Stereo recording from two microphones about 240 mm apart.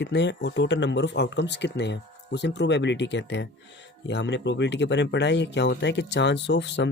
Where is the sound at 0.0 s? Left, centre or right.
Left.